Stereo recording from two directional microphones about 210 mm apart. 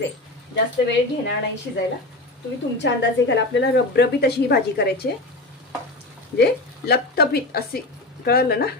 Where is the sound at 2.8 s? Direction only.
55° left (ahead or behind).